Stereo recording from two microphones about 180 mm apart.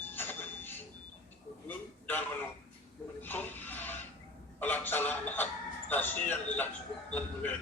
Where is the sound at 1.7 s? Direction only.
10° left (ahead or behind).